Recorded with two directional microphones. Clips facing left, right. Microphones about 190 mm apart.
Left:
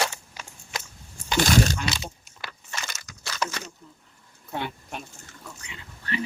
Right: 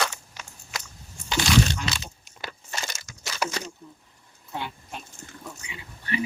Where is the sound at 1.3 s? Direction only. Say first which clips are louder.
Left 1 dB; 50° left (ahead or behind).